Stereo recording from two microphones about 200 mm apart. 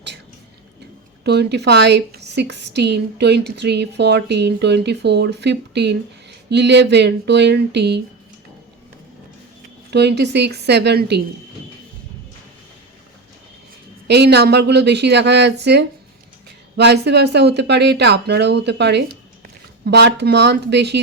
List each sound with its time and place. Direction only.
1.2 s a woman's voice: 55° right (ahead or behind)
9.9 s a woman's voice: 55° right (ahead or behind)
14.1 s a woman's voice: 55° right (ahead or behind)